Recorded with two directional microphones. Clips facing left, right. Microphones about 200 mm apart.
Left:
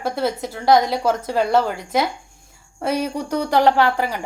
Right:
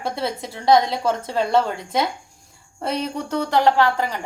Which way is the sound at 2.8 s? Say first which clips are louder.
Left 3 dB; 5° left (ahead or behind).